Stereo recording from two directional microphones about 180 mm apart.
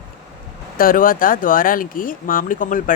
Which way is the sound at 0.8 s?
50° left (ahead or behind).